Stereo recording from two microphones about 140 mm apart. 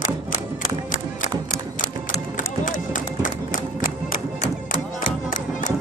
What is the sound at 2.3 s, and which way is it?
Music, 75° left (ahead or behind).